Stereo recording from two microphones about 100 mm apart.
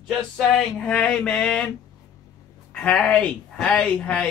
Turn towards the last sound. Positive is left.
turn(degrees=10)  # may be behind; listen again after turning